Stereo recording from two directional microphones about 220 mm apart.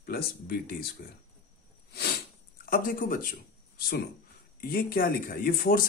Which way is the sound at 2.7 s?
40° left (ahead or behind).